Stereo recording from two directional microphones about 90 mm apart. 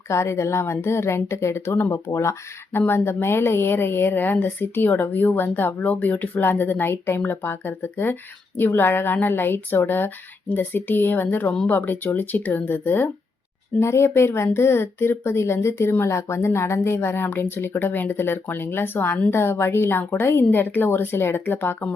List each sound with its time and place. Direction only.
0.1 s a woman's voice: 30° left (ahead or behind)